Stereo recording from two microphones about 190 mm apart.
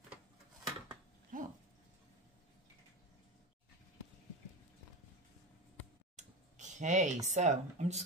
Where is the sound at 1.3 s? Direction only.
45° right (ahead or behind).